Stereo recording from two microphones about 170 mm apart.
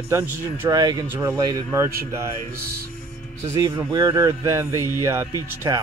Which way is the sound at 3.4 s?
15° right (ahead or behind).